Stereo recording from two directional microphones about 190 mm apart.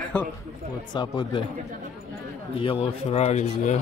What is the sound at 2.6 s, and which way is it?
A man's voice, 30° left (ahead or behind).